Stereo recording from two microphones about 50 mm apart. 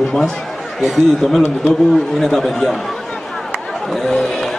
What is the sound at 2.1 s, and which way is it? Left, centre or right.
Speech, centre.